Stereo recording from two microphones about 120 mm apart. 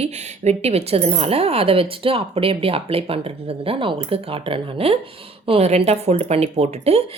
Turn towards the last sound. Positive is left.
turn(degrees=-60)  # may be behind; listen again after turning